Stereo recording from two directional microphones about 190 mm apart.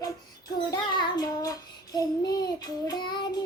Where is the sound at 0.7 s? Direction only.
20° left (ahead or behind).